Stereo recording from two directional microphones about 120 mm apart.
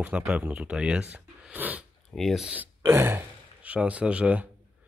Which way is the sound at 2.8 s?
25° right (ahead or behind).